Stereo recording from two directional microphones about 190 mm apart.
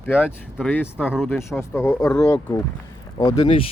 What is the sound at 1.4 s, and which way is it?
Speech, 15° left (ahead or behind).